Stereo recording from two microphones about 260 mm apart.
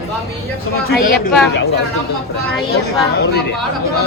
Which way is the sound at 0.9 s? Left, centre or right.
Left.